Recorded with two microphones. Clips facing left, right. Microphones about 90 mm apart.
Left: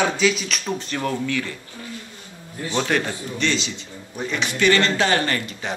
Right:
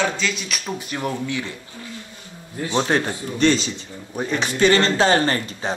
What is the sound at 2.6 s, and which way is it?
Speech, 25° right (ahead or behind).